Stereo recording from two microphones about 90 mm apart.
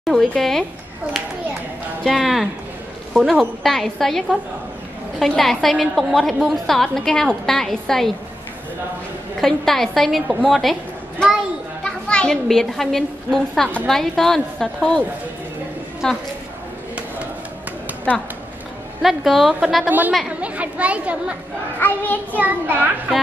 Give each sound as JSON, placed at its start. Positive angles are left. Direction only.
{"t": 0.0, "sound": "a woman's voice", "side_deg": 0}
{"t": 2.0, "sound": "a woman's voice", "side_deg": 0}
{"t": 5.2, "sound": "a woman's voice", "side_deg": 5}
{"t": 9.4, "sound": "a woman's voice", "side_deg": 5}
{"t": 19.0, "sound": "a woman's voice", "side_deg": 0}
{"t": 21.7, "sound": "a child's voice", "side_deg": 20}
{"t": 22.4, "sound": "a woman's voice", "side_deg": -20}